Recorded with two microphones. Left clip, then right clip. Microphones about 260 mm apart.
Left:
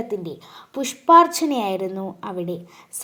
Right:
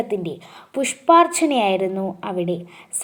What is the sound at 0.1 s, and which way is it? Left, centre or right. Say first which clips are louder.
A woman's voice: right 3 dB; left.